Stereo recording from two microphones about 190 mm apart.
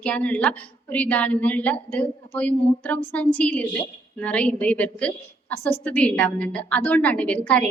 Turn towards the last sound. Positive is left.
turn(degrees=5)  # may be behind; listen again after turning